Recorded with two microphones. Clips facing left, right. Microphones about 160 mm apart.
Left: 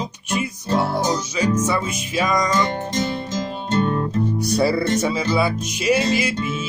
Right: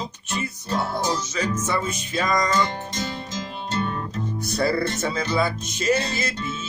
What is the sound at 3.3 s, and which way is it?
Music, 50° left (ahead or behind).